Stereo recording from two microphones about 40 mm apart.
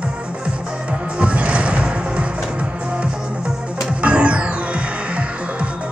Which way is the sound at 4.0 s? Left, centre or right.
Right.